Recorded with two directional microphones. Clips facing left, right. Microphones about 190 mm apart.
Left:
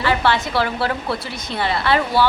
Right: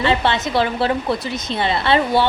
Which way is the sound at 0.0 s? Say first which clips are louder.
Right 1 dB; 25° right (ahead or behind).